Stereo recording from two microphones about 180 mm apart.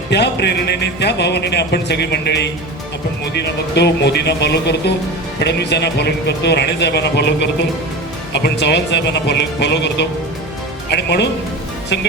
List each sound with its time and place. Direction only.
0.1 s a man's voice: 70° left (ahead or behind)